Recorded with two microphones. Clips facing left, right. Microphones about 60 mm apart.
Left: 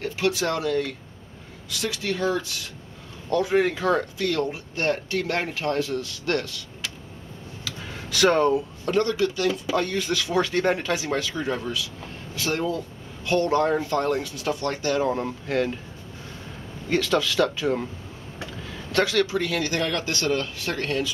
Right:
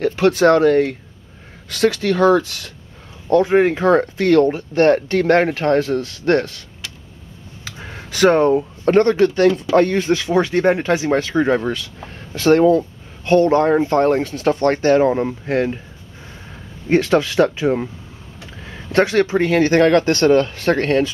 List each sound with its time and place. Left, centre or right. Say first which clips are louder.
0.0 s speech: right 11 dB; right
3.3 s speech: right 8 dB; right
7.6 s speech: right 2 dB; right
16.9 s speech: right 7 dB; right